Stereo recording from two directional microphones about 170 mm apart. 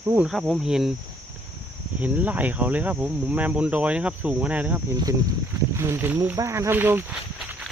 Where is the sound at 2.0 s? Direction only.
10° right (ahead or behind).